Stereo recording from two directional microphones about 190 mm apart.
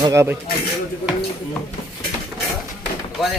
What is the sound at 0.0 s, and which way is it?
Speech, 15° right (ahead or behind).